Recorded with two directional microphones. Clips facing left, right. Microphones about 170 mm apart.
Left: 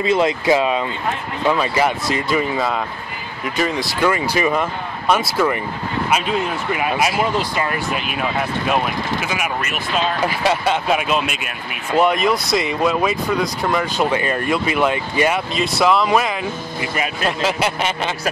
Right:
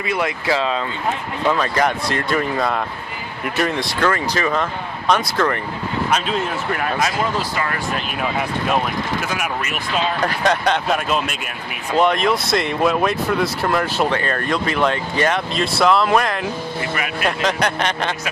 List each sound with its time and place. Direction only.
0.0 s speech: 25° left (ahead or behind); by 3.8 s centre (ahead or behind)
4.0 s speech: 10° left (ahead or behind)
7.9 s speech: 5° left (ahead or behind)
14.1 s speech: 10° left (ahead or behind)
16.8 s speech: 25° left (ahead or behind)
17.4 s speech: 5° left (ahead or behind)